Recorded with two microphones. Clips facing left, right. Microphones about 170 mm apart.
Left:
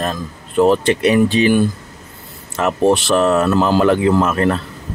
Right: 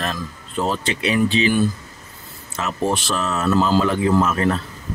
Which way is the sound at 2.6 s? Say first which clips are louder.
Left 8 dB; 65° left (ahead or behind).